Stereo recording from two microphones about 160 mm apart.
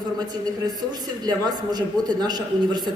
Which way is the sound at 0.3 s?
25° right (ahead or behind).